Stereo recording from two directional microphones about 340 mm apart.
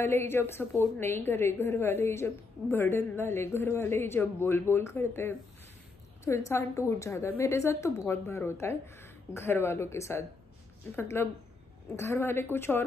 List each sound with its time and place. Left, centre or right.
0.0 s a woman's voice: centre